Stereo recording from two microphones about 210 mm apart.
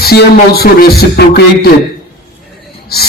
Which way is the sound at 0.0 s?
50° left (ahead or behind).